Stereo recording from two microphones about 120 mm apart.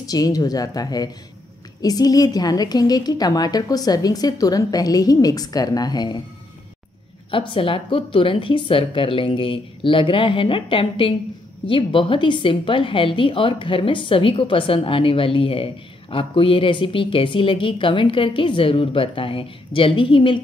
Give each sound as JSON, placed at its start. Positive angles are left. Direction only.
{"t": 0.0, "sound": "a woman's voice", "side_deg": 30}
{"t": 7.2, "sound": "a woman's voice", "side_deg": 45}